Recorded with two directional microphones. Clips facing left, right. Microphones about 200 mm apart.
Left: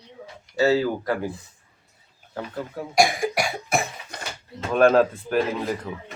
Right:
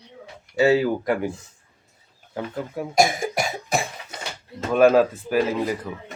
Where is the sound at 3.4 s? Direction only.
35° right (ahead or behind).